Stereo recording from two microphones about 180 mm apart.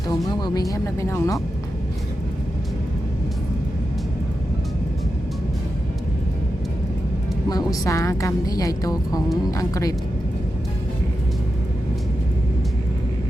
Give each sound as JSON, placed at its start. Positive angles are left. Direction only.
{"t": 0.1, "sound": "speech", "side_deg": 20}
{"t": 7.5, "sound": "a woman's voice", "side_deg": 20}